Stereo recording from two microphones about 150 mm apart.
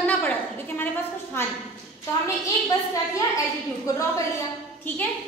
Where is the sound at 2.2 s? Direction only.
20° left (ahead or behind).